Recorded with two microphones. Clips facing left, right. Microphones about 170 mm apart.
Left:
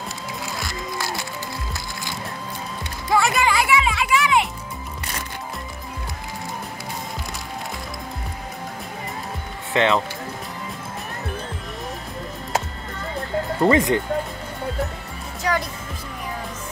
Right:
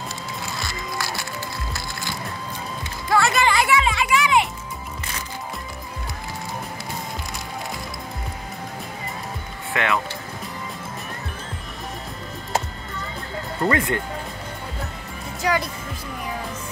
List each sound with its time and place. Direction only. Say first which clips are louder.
3.1 s music: even; 15° left (ahead or behind)
9.8 s speech: left 5 dB; 25° left (ahead or behind)
13.7 s speech: left 4 dB; 20° left (ahead or behind)
15.4 s speech: right 1 dB; centre (ahead or behind)